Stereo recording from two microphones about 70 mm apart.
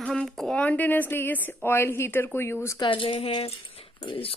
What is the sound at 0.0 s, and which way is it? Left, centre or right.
Speech, centre.